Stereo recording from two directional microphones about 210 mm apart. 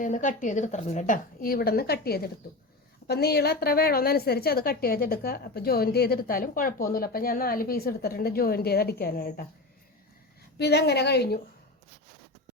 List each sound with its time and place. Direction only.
0.0 s a woman's voice: 35° left (ahead or behind)
10.6 s a woman's voice: 50° left (ahead or behind)